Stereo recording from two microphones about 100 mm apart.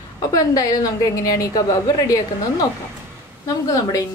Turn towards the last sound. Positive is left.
turn(degrees=35)  # may be behind; listen again after turning